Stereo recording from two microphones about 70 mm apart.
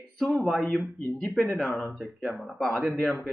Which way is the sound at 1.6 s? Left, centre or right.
Left.